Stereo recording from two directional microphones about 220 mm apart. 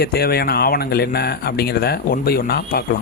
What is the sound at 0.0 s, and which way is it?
Speech, 45° left (ahead or behind).